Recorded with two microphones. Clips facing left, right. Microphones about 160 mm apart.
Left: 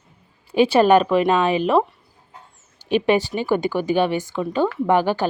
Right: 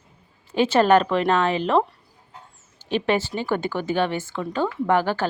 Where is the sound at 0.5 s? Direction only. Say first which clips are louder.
Left 3 dB; 15° left (ahead or behind).